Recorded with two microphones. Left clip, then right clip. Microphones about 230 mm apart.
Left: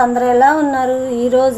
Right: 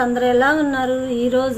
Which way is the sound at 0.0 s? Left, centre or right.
Centre.